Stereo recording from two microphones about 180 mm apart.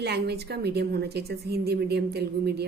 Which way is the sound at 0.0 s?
65° right (ahead or behind).